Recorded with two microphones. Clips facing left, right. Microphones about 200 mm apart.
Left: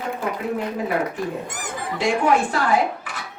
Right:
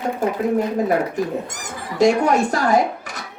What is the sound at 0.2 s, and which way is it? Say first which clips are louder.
Speech: right 6 dB; 45° right (ahead or behind).